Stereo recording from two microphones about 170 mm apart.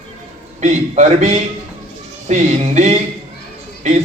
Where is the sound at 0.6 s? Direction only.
40° right (ahead or behind).